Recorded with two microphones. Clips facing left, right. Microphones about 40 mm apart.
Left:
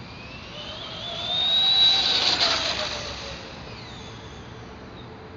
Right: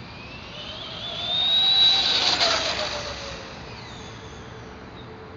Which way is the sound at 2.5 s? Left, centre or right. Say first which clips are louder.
Right 1 dB; left.